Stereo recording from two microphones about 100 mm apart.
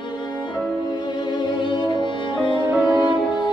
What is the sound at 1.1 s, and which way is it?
Music, 50° left (ahead or behind).